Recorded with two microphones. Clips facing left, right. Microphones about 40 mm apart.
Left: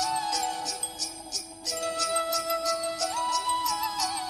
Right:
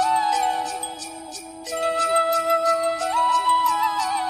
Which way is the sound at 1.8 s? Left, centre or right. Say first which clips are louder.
Right 9 dB; right.